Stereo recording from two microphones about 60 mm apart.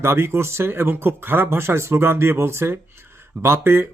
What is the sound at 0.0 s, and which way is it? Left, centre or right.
Speech, right.